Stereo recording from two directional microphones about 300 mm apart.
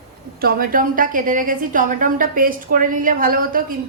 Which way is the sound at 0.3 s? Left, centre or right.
Right.